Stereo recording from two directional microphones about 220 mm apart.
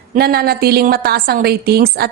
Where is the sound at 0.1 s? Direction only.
45° right (ahead or behind).